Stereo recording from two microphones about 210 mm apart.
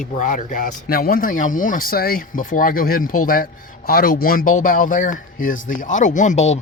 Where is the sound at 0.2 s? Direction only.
35° left (ahead or behind).